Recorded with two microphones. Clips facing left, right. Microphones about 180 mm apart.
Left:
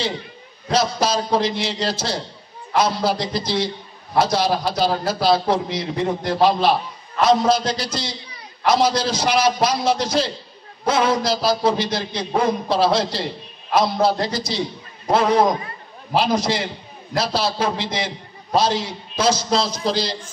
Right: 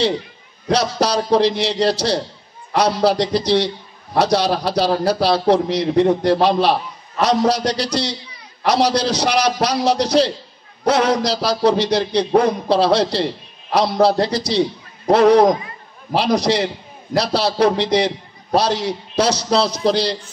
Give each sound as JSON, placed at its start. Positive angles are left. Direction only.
{"t": 0.7, "sound": "a man's voice", "side_deg": -70}